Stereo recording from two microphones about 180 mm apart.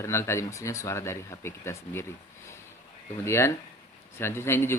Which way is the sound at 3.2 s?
15° left (ahead or behind).